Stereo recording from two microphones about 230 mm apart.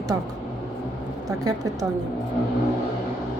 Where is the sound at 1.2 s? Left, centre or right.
Centre.